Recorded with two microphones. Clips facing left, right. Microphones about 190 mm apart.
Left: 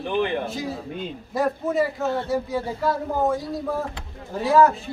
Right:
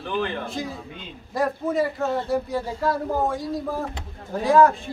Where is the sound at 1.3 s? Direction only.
Centre (ahead or behind).